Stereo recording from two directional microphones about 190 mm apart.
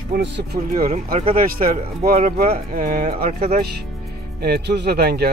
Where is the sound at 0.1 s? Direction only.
55° right (ahead or behind); by 3.6 s 35° right (ahead or behind).